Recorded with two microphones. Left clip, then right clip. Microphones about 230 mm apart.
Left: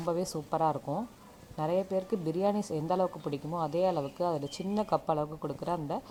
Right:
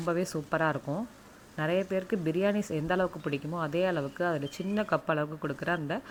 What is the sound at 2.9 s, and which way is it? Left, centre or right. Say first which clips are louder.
Speech: right 1 dB; right.